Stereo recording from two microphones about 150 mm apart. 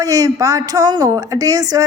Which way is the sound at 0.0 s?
25° right (ahead or behind).